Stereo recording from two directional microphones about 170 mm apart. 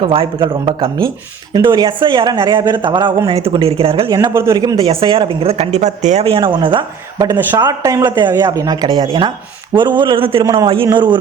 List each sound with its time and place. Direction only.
0.0 s speech: 30° right (ahead or behind)
4.1 s a woman's voice: 20° right (ahead or behind)